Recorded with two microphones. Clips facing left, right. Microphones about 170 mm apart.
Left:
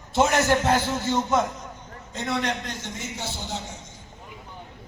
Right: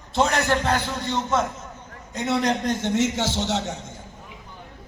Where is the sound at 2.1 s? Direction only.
20° right (ahead or behind).